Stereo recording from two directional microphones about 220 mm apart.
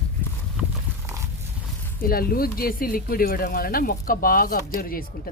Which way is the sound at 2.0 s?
40° left (ahead or behind).